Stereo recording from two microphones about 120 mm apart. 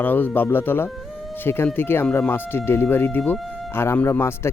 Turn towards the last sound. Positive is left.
turn(degrees=20)  # may be behind; listen again after turning